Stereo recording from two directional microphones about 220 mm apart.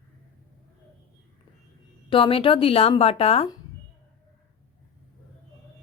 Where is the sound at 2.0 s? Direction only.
25° left (ahead or behind).